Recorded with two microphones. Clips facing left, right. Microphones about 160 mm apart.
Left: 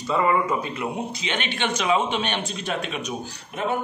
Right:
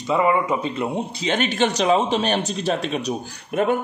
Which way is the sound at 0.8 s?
35° right (ahead or behind).